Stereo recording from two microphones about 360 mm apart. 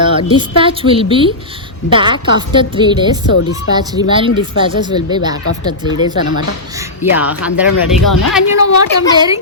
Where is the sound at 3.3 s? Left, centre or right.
Left.